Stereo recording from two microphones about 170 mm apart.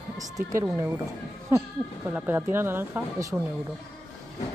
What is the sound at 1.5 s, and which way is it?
Speech, 10° right (ahead or behind).